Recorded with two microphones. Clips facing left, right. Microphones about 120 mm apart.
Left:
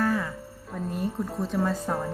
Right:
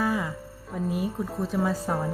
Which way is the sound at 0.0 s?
10° right (ahead or behind).